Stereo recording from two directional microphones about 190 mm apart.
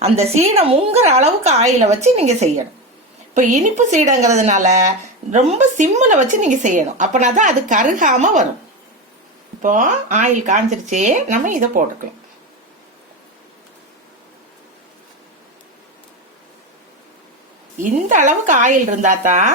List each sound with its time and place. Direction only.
0.0 s speech: 35° right (ahead or behind)
9.6 s speech: 40° right (ahead or behind)
17.8 s speech: 40° right (ahead or behind)